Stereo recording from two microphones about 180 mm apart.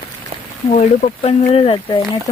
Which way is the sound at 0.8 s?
35° left (ahead or behind).